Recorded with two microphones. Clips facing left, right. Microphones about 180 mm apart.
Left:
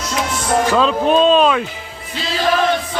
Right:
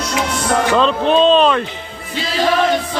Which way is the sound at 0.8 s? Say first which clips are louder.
Right 1 dB; 5° left (ahead or behind).